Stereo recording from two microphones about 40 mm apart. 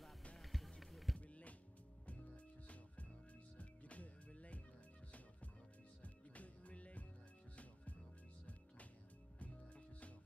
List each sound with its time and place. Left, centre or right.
0.4 s music: centre
1.2 s music: left
6.0 s music: left
9.4 s music: left